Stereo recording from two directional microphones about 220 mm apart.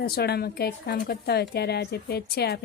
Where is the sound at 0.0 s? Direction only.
45° left (ahead or behind).